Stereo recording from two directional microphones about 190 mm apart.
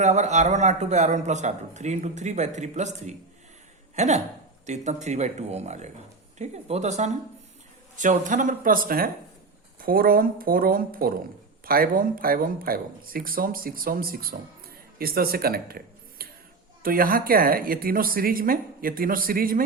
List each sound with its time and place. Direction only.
0.0 s a man's voice: 40° right (ahead or behind)